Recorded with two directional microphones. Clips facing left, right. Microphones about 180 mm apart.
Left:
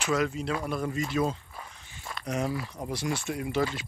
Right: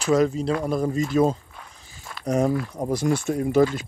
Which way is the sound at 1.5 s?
Centre (ahead or behind).